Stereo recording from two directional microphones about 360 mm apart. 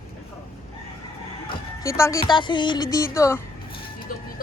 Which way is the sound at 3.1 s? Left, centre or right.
Centre.